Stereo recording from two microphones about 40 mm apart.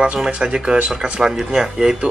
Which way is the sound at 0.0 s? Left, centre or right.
Right.